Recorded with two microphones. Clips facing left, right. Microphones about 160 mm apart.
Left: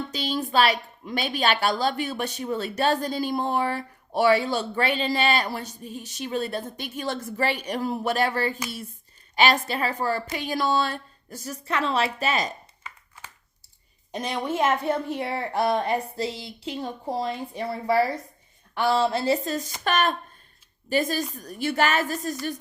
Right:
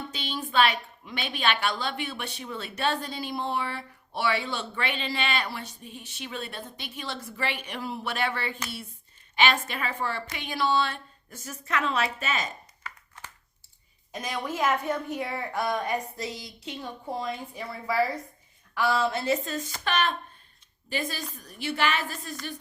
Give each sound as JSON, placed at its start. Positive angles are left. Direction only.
{"t": 0.1, "sound": "a woman's voice", "side_deg": 40}
{"t": 14.1, "sound": "a woman's voice", "side_deg": 30}